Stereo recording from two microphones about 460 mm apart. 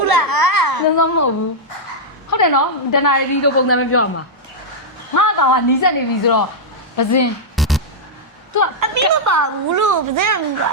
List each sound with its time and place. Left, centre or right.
0.0 s a sound: right
0.9 s a woman's voice: left
2.3 s a woman's voice: left
5.1 s a woman's voice: left
7.5 s music: centre
8.8 s a woman's voice: right